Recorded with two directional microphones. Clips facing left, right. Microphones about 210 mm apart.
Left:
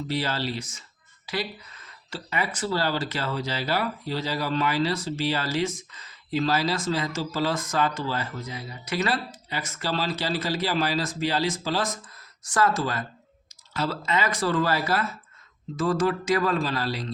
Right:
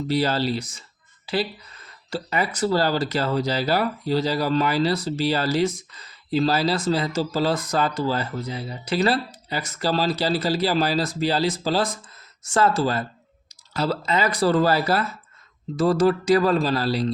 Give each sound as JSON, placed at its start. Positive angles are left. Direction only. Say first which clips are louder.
{"t": 0.1, "sound": "speech", "louder": "right 7 dB", "side_deg": -35}